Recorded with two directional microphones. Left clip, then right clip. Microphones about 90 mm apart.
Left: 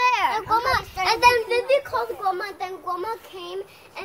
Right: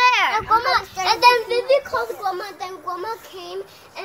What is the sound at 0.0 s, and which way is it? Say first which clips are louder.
Children playing: right 4 dB; 35° left (ahead or behind).